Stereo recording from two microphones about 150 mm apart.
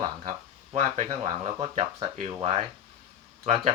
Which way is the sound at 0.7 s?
50° right (ahead or behind).